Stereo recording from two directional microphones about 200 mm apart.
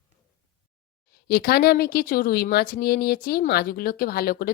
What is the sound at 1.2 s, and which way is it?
Speech, 50° left (ahead or behind).